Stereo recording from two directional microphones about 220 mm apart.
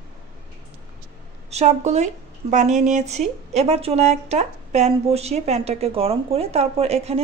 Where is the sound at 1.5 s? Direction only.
30° right (ahead or behind).